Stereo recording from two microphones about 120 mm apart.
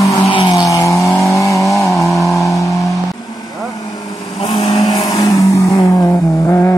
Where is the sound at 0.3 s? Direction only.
40° left (ahead or behind); by 1.6 s 25° left (ahead or behind).